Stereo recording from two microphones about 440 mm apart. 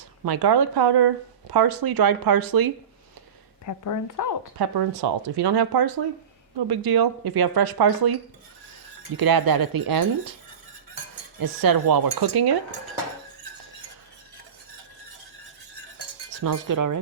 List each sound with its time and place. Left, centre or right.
0.3 s speech: right
3.7 s a woman's voice: left
4.5 s speech: right
9.1 s speech: right
11.3 s speech: right
16.4 s speech: right